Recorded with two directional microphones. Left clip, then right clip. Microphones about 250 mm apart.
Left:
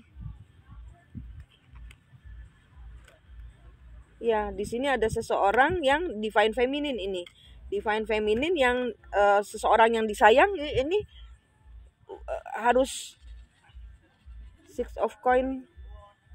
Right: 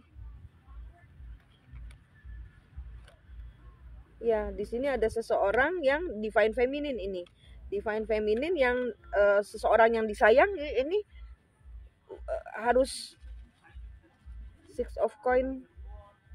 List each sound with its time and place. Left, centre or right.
4.2 s a woman's voice: left
12.1 s frog: left
14.7 s a woman's voice: left